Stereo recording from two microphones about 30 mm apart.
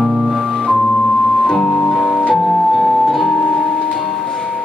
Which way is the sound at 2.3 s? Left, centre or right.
Centre.